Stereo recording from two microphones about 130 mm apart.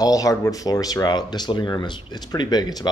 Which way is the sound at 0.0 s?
25° left (ahead or behind).